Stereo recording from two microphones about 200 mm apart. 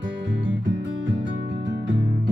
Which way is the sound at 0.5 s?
70° right (ahead or behind).